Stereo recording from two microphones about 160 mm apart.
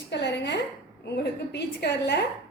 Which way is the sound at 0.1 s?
90° left.